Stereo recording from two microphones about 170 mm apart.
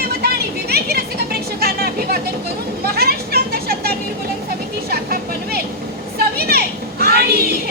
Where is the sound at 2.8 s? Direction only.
65° right (ahead or behind).